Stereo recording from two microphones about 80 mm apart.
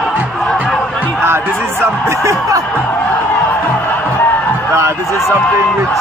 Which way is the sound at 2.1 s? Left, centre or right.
Right.